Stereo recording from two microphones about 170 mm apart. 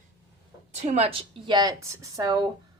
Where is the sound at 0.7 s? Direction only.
40° right (ahead or behind).